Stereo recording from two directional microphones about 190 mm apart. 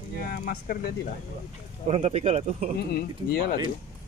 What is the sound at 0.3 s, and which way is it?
Speech, 50° left (ahead or behind).